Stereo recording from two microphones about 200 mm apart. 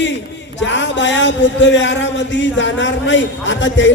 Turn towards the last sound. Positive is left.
turn(degrees=65)  # may be behind; listen again after turning